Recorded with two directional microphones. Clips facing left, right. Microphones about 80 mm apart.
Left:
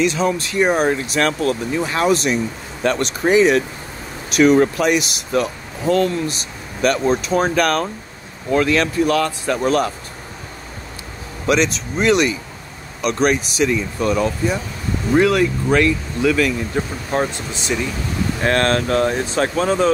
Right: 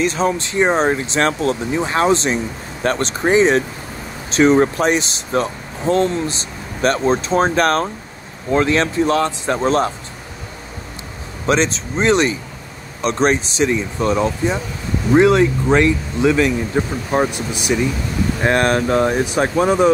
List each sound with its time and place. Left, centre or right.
0.0 s speech: right
0.3 s speech: right
11.4 s speech: right; by 19.9 s centre